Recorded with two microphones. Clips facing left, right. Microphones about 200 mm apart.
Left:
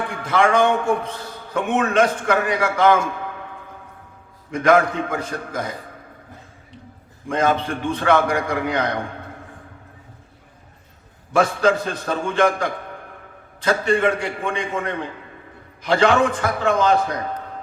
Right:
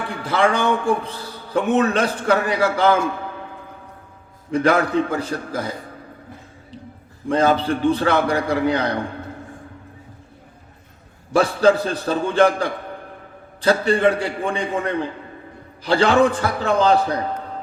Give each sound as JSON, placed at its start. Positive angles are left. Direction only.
{"t": 0.1, "sound": "a man's voice", "side_deg": -35}
{"t": 4.5, "sound": "a man's voice", "side_deg": -35}
{"t": 7.3, "sound": "a man's voice", "side_deg": -35}
{"t": 11.3, "sound": "a man's voice", "side_deg": -35}